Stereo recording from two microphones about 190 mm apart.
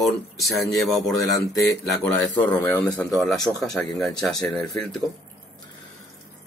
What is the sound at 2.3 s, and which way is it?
Speech, 25° left (ahead or behind).